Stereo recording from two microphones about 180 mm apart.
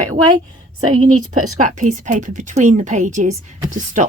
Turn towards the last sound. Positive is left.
turn(degrees=-45)  # may be behind; listen again after turning